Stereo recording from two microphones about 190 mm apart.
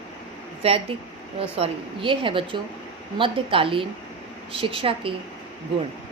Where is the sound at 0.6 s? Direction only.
30° right (ahead or behind).